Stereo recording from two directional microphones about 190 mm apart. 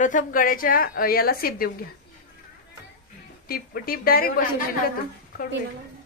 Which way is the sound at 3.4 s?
50° left (ahead or behind).